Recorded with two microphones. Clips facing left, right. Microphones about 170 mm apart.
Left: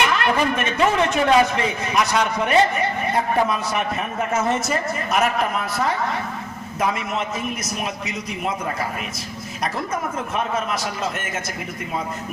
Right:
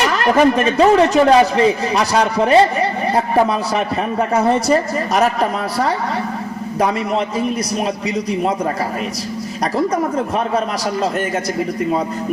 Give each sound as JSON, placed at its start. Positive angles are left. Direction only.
{"t": 0.0, "sound": "a man's voice", "side_deg": -40}
{"t": 9.7, "sound": "a man's voice", "side_deg": -35}